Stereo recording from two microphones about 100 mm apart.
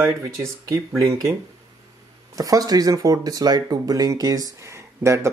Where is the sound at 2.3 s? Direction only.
35° right (ahead or behind).